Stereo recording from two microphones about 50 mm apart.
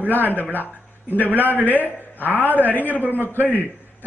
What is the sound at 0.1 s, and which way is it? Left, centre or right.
A man's voice, left.